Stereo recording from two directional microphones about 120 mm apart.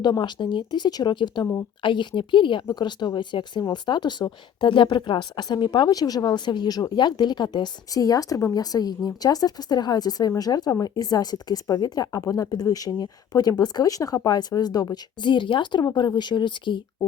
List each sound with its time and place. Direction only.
0.0 s a woman's voice: 35° left (ahead or behind)